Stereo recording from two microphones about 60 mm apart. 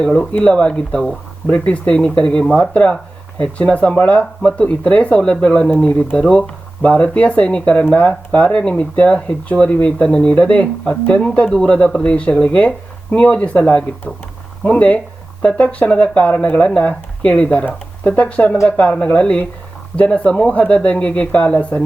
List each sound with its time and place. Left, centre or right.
0.0 s speech: centre